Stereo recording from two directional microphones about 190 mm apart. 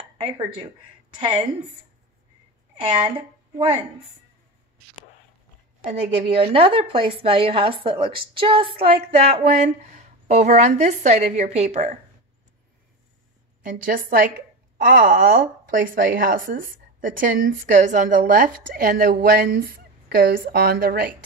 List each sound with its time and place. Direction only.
2.8 s a woman's voice: 25° right (ahead or behind)
5.9 s a woman's voice: 35° right (ahead or behind)
13.6 s a woman's voice: 45° right (ahead or behind)